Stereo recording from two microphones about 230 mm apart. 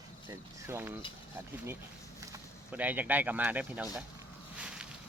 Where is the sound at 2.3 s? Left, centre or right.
Centre.